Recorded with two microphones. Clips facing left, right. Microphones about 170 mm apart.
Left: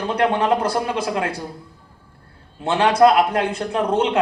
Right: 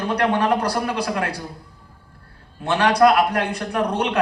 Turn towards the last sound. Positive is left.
turn(degrees=25)  # may be behind; listen again after turning